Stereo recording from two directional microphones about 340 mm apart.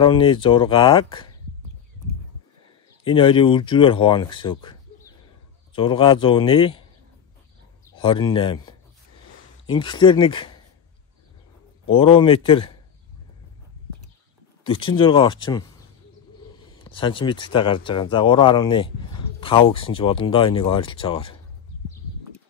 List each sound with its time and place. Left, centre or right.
0.0 s a man's voice: centre
3.0 s a man's voice: centre
7.9 s a man's voice: centre
11.8 s a man's voice: centre
14.6 s a man's voice: centre
16.6 s a man's voice: centre